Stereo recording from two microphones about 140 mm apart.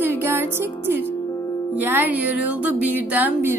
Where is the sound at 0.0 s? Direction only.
15° right (ahead or behind).